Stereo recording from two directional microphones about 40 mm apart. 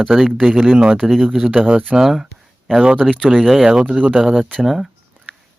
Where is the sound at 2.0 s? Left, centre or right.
Centre.